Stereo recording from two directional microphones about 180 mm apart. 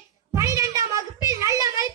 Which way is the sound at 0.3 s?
15° right (ahead or behind).